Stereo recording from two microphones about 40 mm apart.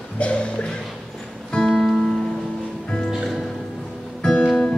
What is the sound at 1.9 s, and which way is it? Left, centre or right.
Music, centre.